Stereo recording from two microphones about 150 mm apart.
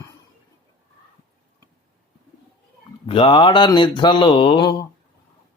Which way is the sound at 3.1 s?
35° left (ahead or behind).